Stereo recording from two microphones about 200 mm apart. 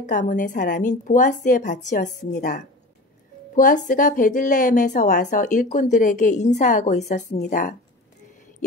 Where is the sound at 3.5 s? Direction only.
40° left (ahead or behind).